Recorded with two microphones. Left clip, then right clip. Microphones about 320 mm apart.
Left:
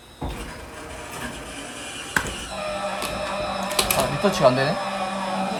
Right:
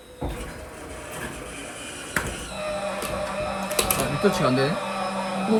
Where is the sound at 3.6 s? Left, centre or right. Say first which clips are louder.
Left 4 dB; centre.